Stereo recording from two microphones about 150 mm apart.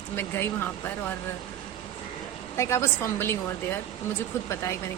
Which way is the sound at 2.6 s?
20° left (ahead or behind).